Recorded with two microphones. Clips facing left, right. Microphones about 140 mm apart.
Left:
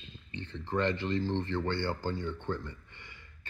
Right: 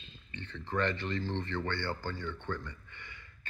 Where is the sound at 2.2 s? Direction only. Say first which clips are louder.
Left 3 dB; 30° left (ahead or behind).